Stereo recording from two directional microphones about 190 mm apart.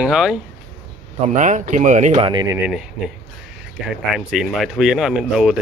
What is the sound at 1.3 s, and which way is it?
Speech, 40° right (ahead or behind).